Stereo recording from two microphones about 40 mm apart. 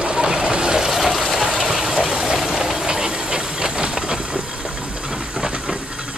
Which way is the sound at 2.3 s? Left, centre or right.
Centre.